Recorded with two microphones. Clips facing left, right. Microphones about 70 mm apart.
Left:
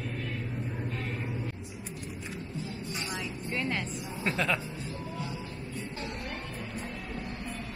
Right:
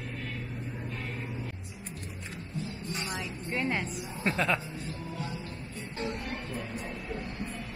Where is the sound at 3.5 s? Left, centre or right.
Right.